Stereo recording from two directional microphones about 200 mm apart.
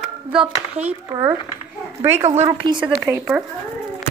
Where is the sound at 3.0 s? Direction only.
5° right (ahead or behind).